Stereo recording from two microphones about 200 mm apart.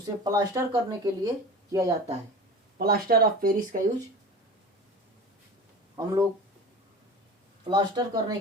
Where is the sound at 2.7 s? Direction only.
50° right (ahead or behind).